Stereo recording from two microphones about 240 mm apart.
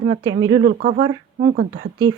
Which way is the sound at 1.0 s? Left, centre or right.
Centre.